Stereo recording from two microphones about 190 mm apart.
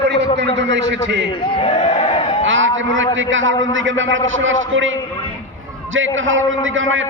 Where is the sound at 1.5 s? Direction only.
25° left (ahead or behind).